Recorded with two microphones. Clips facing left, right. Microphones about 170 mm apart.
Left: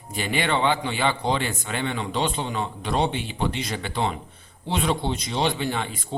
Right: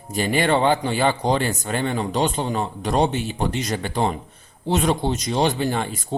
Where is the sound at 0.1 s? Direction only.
40° right (ahead or behind).